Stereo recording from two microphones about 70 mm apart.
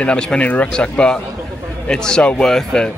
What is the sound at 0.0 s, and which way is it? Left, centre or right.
Speech, centre.